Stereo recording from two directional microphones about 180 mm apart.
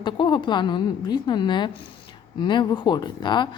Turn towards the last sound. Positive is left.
turn(degrees=25)  # may be behind; listen again after turning